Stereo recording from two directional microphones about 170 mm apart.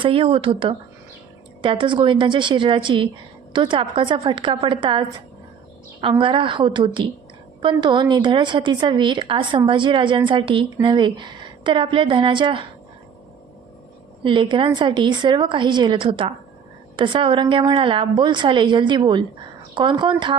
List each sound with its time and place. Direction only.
0.0 s a woman's voice: 30° right (ahead or behind)
14.3 s a woman's voice: 30° right (ahead or behind)